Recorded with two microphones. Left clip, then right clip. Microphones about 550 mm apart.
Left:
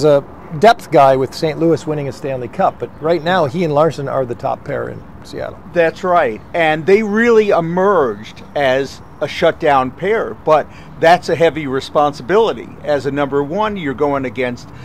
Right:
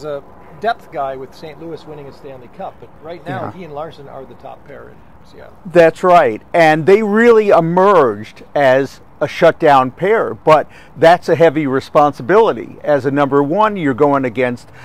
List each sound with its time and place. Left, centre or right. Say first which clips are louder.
0.0 s speech: left 13 dB; left
5.7 s speech: right 5 dB; right